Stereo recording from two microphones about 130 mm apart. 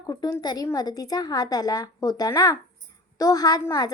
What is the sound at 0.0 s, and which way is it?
A child's voice, 30° left (ahead or behind).